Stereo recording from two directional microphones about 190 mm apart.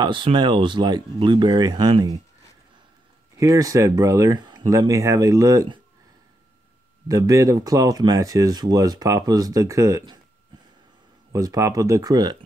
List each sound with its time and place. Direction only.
0.0 s speech: 25° right (ahead or behind)
3.3 s speech: 20° right (ahead or behind)
7.1 s speech: 15° right (ahead or behind)
11.3 s speech: 15° right (ahead or behind)